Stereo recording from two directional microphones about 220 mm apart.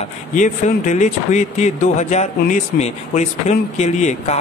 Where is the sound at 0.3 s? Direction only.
35° left (ahead or behind).